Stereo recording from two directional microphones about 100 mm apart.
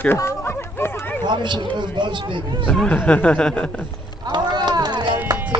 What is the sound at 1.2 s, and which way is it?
Speech, 50° right (ahead or behind).